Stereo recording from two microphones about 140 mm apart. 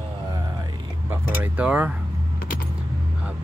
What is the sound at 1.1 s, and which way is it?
Speech, 10° right (ahead or behind).